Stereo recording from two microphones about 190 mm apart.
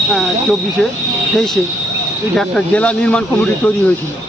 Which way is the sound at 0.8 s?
Centre (ahead or behind).